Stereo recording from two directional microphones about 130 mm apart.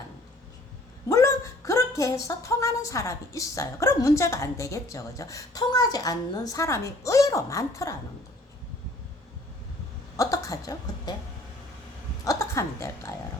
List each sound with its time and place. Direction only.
1.0 s speech: 25° left (ahead or behind)
10.2 s speech: 25° left (ahead or behind)
12.2 s a woman's voice: 25° left (ahead or behind)